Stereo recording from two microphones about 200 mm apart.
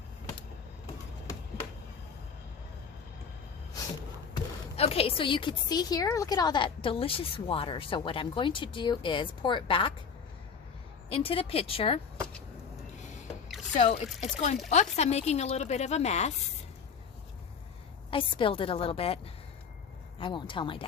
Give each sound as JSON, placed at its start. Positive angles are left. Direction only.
{"t": 4.8, "sound": "a woman's voice", "side_deg": 30}
{"t": 11.1, "sound": "a woman's voice", "side_deg": 30}
{"t": 13.0, "sound": "a sound", "side_deg": 35}
{"t": 13.7, "sound": "speech", "side_deg": 35}
{"t": 18.1, "sound": "a woman's voice", "side_deg": 25}